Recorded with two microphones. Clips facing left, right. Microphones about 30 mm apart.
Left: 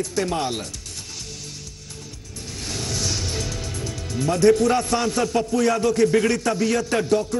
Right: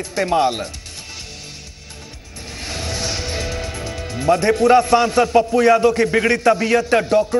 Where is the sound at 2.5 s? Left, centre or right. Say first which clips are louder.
Right 3 dB; right.